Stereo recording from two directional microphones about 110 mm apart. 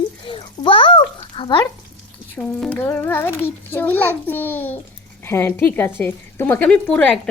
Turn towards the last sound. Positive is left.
turn(degrees=10)  # may be behind; listen again after turning